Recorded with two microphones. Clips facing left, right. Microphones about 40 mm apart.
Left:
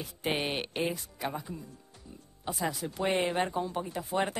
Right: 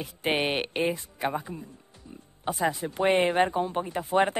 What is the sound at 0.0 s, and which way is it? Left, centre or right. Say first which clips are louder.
Speech: right 5 dB; right.